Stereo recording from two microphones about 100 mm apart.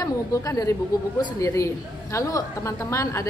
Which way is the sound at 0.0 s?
35° left (ahead or behind).